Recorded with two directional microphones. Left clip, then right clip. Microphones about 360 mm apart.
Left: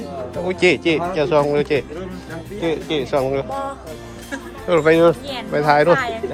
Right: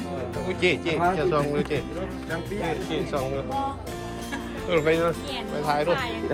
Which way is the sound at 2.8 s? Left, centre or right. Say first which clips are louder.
Left 8 dB; centre.